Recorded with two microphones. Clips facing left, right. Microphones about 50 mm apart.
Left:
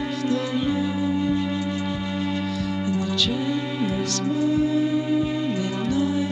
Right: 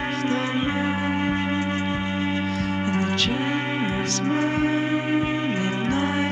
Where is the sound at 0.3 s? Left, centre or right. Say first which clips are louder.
Left 2 dB; right.